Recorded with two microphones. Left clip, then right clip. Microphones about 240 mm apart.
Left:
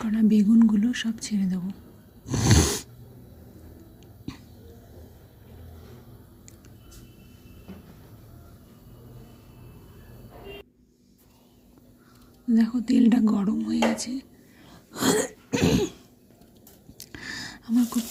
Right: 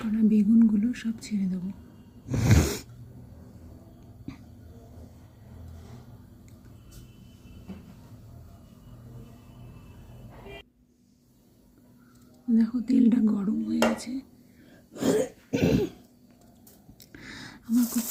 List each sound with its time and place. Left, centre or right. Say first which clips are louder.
0.0 s speech: left 2 dB; centre
2.2 s sneeze: left 4 dB; centre
12.5 s speech: left 2 dB; centre
14.7 s sneeze: left 2 dB; centre
15.5 s cough: left 2 dB; centre
17.0 s a sound: left 7 dB; centre